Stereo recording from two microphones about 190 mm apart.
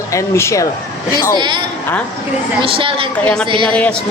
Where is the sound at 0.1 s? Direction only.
15° left (ahead or behind).